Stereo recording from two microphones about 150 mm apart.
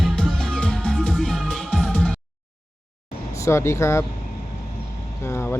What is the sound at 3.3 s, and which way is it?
Speech, 20° left (ahead or behind).